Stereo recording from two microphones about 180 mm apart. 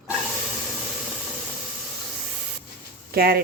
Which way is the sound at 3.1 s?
55° right (ahead or behind).